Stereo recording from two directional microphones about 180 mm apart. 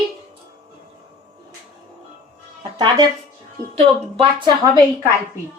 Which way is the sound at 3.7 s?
35° right (ahead or behind).